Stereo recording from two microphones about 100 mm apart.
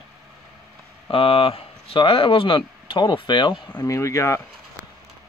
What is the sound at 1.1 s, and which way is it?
Speech, 70° left (ahead or behind).